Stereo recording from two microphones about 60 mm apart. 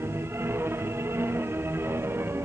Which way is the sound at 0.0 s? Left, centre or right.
Right.